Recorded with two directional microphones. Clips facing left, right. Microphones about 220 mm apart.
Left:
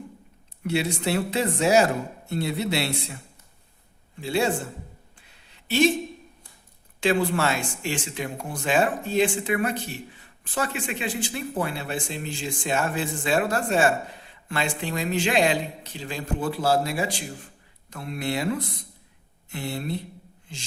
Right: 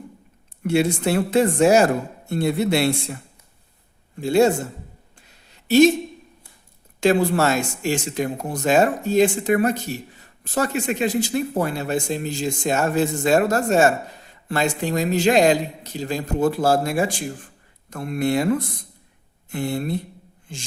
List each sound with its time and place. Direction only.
0.6 s speech: 50° right (ahead or behind)
4.2 s speech: 45° right (ahead or behind)
5.2 s a sound: 40° right (ahead or behind)
7.0 s speech: 40° right (ahead or behind)